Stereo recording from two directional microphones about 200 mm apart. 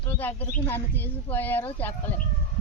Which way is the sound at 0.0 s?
10° left (ahead or behind).